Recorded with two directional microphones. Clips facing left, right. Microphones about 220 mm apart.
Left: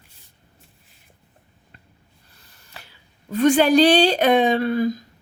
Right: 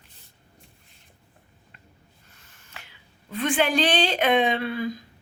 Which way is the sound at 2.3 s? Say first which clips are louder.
Left 3 dB; 35° left (ahead or behind).